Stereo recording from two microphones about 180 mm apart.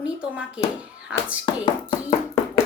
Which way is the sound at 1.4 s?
30° left (ahead or behind).